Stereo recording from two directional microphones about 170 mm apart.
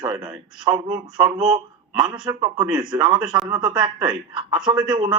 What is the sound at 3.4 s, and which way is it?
Speech, 25° right (ahead or behind).